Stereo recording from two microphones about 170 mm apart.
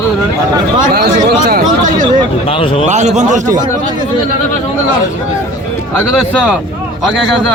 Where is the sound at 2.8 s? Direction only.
45° right (ahead or behind).